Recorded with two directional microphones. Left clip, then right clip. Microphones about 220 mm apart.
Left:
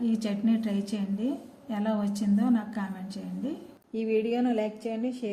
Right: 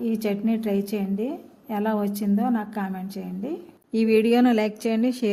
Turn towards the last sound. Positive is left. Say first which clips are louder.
# right 8 dB
turn(degrees=-50)  # may be behind; listen again after turning